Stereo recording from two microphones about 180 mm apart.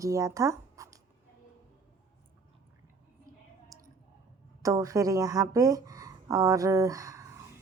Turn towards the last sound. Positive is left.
turn(degrees=-15)  # may be behind; listen again after turning